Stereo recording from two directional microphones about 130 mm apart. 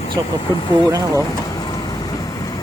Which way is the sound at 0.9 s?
25° right (ahead or behind).